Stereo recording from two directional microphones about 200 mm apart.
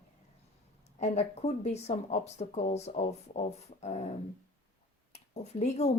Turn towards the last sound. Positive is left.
turn(degrees=35)  # may be behind; listen again after turning